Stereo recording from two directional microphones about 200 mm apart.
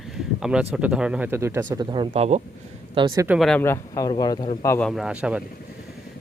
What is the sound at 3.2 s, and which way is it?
Speech, 5° right (ahead or behind).